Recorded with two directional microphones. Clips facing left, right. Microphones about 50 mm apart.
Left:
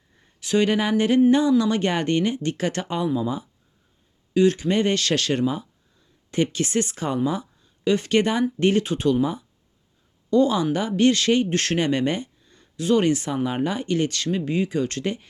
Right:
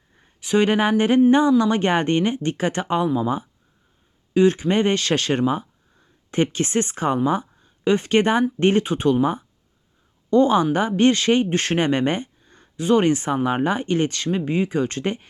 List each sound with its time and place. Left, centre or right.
0.3 s speech: right
4.4 s speech: right
11.8 s speech: right